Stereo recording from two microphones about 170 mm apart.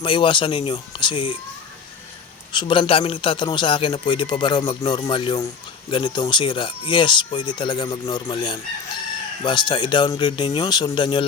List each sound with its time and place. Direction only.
0.0 s speech: 30° left (ahead or behind)
2.5 s speech: 30° left (ahead or behind)